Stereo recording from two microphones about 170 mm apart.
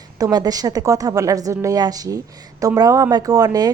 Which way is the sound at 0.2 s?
20° right (ahead or behind).